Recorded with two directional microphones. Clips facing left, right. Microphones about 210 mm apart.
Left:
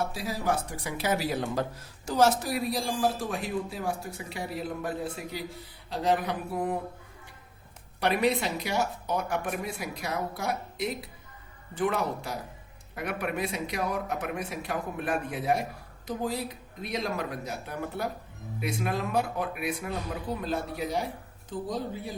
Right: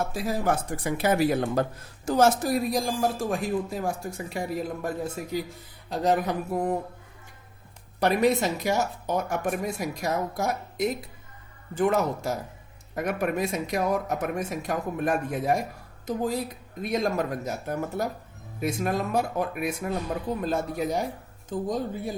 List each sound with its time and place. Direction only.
0.0 s speech: 50° right (ahead or behind)
7.9 s speech: 45° right (ahead or behind)